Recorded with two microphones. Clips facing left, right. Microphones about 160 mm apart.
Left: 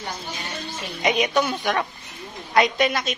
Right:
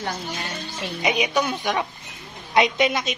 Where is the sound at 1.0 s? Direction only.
10° right (ahead or behind).